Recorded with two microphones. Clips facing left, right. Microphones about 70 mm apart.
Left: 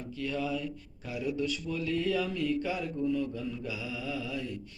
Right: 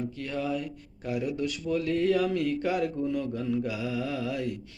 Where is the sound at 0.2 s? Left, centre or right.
Right.